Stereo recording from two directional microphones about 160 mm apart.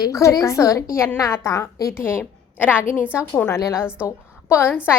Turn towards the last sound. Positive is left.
turn(degrees=15)  # may be behind; listen again after turning